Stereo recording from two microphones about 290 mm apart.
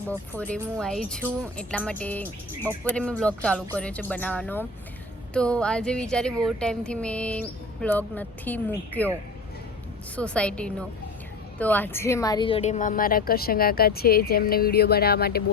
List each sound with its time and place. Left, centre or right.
0.1 s speech: centre
10.2 s a woman's voice: centre; by 15.4 s left